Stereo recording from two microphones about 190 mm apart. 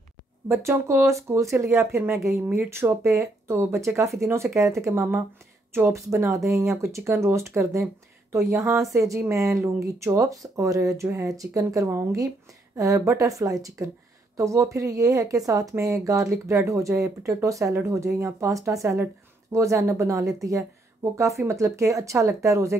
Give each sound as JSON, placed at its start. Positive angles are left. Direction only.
{"t": 0.5, "sound": "speech", "side_deg": -15}